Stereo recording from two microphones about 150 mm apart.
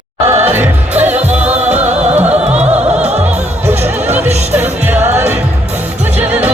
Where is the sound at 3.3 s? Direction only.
45° right (ahead or behind).